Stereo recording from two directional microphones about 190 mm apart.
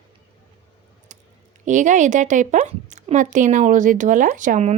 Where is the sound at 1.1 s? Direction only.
40° right (ahead or behind).